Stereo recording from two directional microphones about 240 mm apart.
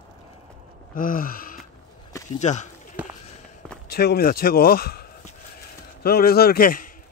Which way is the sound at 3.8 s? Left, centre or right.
Left.